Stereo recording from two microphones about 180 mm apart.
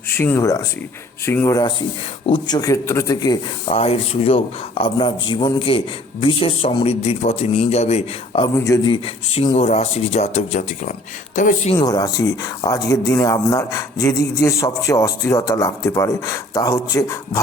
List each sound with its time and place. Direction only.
0.1 s speech: 10° left (ahead or behind)
3.7 s a man's voice: 30° left (ahead or behind)
8.5 s a man's voice: 15° left (ahead or behind); by 11.7 s 45° left (ahead or behind)
11.7 s speech: 20° left (ahead or behind)